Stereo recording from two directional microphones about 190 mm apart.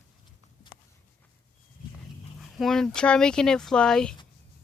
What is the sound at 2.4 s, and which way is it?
Speech, centre (ahead or behind).